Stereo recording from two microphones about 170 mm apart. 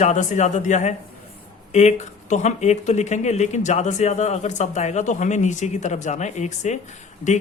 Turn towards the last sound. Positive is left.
turn(degrees=45)  # may be behind; listen again after turning